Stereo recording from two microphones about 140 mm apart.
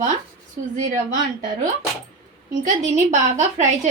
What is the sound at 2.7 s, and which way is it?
A woman's voice, 60° right (ahead or behind).